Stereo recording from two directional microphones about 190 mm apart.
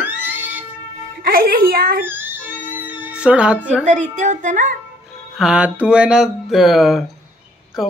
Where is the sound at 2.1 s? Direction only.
10° right (ahead or behind).